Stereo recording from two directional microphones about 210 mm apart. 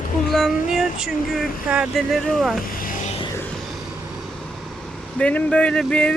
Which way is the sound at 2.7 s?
40° left (ahead or behind).